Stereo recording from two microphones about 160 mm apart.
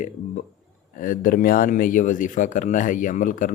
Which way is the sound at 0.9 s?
60° left (ahead or behind).